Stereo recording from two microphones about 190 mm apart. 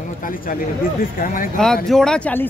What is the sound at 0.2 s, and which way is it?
Speech, 45° left (ahead or behind).